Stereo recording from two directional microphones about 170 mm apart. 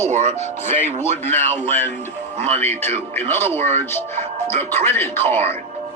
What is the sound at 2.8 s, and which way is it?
Speech, 10° left (ahead or behind).